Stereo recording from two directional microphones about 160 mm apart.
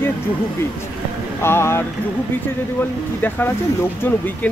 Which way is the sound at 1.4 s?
15° left (ahead or behind).